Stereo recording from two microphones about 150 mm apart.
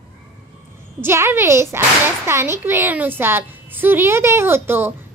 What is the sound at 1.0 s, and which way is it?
A child's voice, 15° right (ahead or behind).